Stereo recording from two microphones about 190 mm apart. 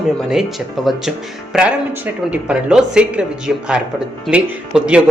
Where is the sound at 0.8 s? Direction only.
Centre (ahead or behind).